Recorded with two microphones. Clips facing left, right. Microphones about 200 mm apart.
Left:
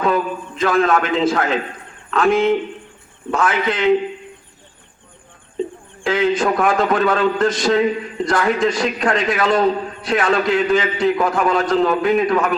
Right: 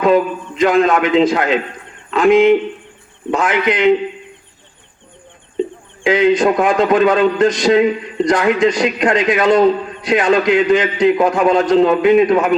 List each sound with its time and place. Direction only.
0.6 s a man's voice: 20° right (ahead or behind)
6.0 s a man's voice: 20° right (ahead or behind)